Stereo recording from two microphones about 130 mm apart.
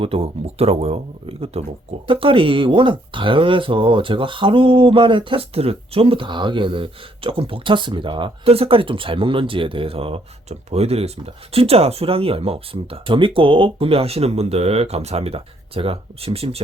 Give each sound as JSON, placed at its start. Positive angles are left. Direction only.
{"t": 0.0, "sound": "speech", "side_deg": -50}